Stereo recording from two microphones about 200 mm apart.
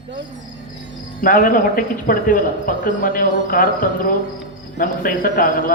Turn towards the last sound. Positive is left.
turn(degrees=45)  # may be behind; listen again after turning